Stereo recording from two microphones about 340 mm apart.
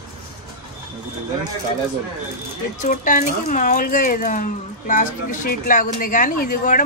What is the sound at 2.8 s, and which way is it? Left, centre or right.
Speech, left.